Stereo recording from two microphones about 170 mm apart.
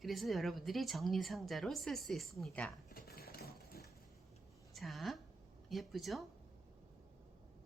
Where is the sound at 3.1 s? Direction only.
65° left (ahead or behind).